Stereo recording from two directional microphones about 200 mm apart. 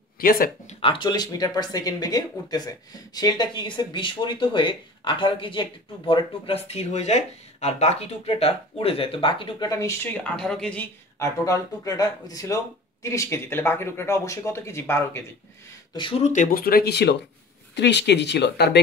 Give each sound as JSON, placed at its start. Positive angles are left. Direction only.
{"t": 0.2, "sound": "speech", "side_deg": 45}
{"t": 0.7, "sound": "speech", "side_deg": 25}
{"t": 10.3, "sound": "speech", "side_deg": 5}